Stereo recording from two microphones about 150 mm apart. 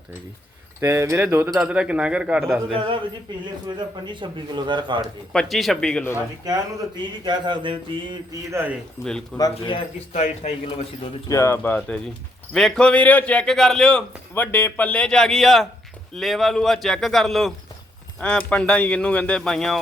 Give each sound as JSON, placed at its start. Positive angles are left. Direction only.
{"t": 0.8, "sound": "a man's voice", "side_deg": -20}
{"t": 2.7, "sound": "speech", "side_deg": -35}
{"t": 5.3, "sound": "a man's voice", "side_deg": 0}
{"t": 6.4, "sound": "speech", "side_deg": -25}
{"t": 8.4, "sound": "a man's voice", "side_deg": -15}
{"t": 9.4, "sound": "speech", "side_deg": 30}
{"t": 10.1, "sound": "speech", "side_deg": 45}
{"t": 11.3, "sound": "speech", "side_deg": 20}
{"t": 12.5, "sound": "a man's voice", "side_deg": 5}